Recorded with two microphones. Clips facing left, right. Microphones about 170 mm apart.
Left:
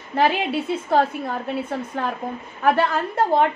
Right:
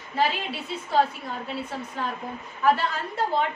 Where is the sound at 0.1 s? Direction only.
60° left (ahead or behind).